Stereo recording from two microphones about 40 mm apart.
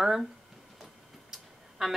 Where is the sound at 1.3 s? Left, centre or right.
Centre.